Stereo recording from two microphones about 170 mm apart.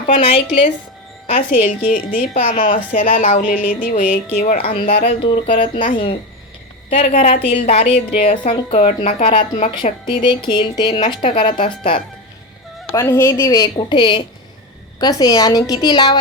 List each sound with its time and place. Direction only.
0.1 s a woman's voice: 30° left (ahead or behind)
1.3 s a woman's voice: 55° left (ahead or behind)
5.0 s a woman's voice: 30° left (ahead or behind)
6.9 s a woman's voice: 35° left (ahead or behind)
12.9 s a woman's voice: 15° left (ahead or behind)